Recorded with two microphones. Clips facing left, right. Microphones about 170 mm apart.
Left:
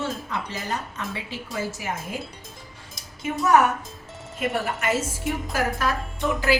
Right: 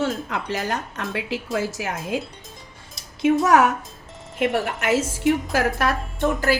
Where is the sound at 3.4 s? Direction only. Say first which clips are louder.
Left 1 dB; 90° right.